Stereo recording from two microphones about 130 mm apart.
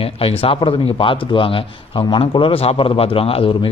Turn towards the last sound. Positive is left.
turn(degrees=45)  # may be behind; listen again after turning